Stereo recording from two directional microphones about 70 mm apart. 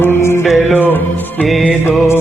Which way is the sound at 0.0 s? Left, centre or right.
Left.